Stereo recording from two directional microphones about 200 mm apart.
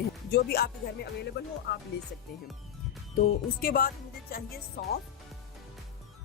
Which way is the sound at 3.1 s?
45° left (ahead or behind).